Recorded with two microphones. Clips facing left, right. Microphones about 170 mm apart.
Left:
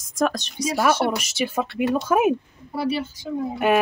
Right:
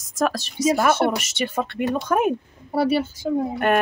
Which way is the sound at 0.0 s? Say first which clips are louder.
Even; centre (ahead or behind).